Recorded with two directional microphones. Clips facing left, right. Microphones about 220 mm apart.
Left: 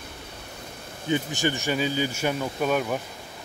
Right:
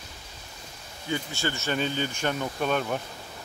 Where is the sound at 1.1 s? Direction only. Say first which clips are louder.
Left 5 dB; 15° left (ahead or behind).